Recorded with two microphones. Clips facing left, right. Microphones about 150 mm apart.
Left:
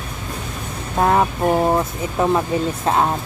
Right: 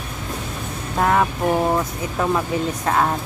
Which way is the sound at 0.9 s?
20° left (ahead or behind).